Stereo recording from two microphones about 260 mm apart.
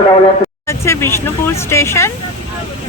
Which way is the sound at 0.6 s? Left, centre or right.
Centre.